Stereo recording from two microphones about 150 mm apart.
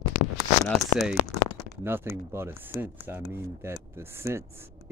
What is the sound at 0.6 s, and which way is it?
Speech, centre (ahead or behind).